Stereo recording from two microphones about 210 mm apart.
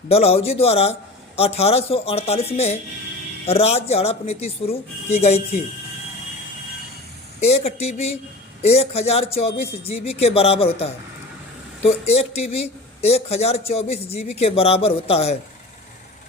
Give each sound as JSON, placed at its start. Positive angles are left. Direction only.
{"t": 0.1, "sound": "speech", "side_deg": 30}
{"t": 7.4, "sound": "speech", "side_deg": 30}